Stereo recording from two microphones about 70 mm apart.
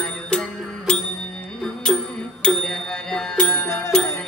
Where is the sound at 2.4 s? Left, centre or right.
Centre.